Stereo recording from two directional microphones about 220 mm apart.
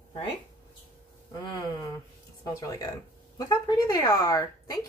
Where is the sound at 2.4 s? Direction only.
15° left (ahead or behind).